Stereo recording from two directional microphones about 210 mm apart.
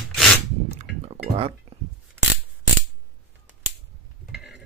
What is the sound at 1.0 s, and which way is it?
Chink, 30° right (ahead or behind).